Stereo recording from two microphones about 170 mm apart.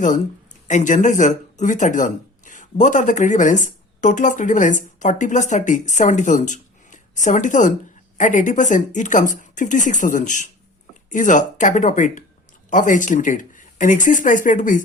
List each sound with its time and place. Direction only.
0.7 s speech: 45° left (ahead or behind)